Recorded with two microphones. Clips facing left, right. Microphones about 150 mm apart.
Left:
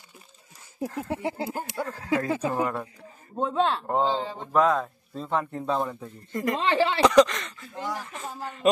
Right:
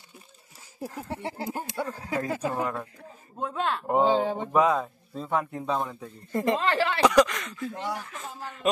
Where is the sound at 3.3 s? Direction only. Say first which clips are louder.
Left 5 dB; 25° left (ahead or behind).